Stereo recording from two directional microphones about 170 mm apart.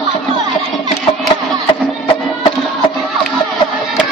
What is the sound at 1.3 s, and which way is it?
Music, 25° left (ahead or behind).